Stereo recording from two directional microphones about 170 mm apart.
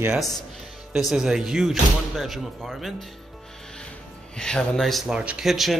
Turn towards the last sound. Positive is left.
turn(degrees=0)  # may be behind; listen again after turning